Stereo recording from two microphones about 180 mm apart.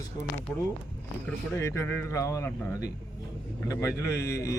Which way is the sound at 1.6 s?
15° left (ahead or behind).